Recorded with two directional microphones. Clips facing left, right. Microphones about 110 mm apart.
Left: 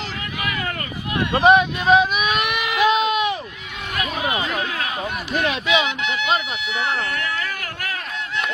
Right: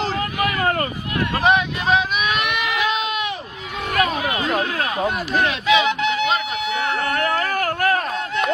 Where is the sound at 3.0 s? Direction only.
25° left (ahead or behind).